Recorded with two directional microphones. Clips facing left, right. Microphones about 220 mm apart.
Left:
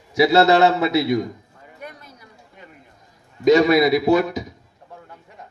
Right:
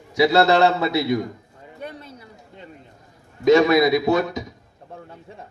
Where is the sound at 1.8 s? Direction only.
30° right (ahead or behind).